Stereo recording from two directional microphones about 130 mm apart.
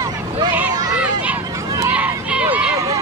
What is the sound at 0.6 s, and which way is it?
Children playing, 10° right (ahead or behind).